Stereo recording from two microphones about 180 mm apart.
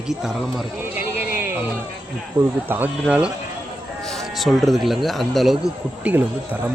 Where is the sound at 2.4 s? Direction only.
25° right (ahead or behind).